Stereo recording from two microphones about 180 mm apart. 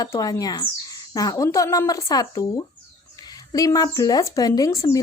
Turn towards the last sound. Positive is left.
turn(degrees=20)  # may be behind; listen again after turning